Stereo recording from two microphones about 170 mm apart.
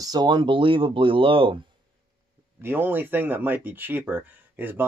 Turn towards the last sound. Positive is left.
turn(degrees=-10)  # may be behind; listen again after turning